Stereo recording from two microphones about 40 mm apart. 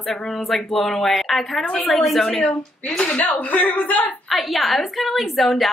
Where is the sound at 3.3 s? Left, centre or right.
Left.